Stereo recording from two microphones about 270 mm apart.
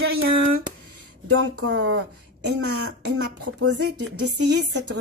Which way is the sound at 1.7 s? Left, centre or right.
Right.